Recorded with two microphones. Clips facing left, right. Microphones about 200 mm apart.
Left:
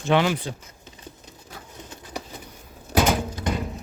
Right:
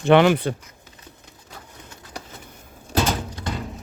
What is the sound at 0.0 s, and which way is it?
Speech, 60° right (ahead or behind).